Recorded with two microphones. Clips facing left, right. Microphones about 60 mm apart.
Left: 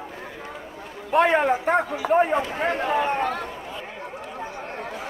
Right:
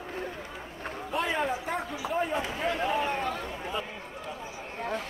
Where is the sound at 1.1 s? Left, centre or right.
Left.